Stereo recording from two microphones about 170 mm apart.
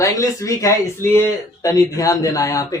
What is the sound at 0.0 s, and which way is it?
Speech, 20° left (ahead or behind).